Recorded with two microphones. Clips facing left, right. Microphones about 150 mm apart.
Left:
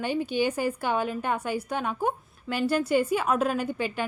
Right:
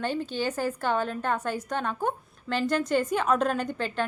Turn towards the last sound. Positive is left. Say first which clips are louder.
# even
turn(degrees=10)  # may be behind; listen again after turning